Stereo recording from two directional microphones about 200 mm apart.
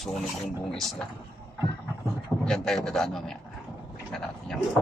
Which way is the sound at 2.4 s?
Centre (ahead or behind).